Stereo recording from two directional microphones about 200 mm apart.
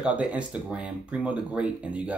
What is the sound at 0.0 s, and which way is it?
Speech, 5° right (ahead or behind).